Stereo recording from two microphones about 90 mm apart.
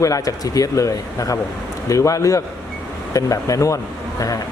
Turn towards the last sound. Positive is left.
turn(degrees=40)  # may be behind; listen again after turning